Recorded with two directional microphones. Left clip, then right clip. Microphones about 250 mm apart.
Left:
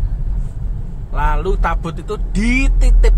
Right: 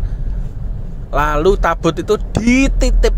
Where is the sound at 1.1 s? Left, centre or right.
Right.